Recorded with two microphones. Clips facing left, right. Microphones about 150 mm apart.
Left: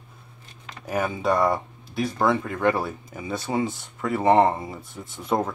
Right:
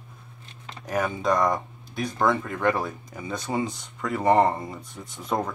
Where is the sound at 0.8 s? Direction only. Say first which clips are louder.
Left 1 dB; 5° left (ahead or behind).